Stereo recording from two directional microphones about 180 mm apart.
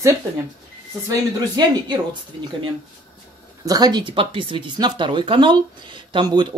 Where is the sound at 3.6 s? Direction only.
20° right (ahead or behind).